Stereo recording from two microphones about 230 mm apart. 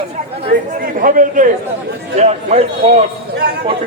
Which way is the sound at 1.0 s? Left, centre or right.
Right.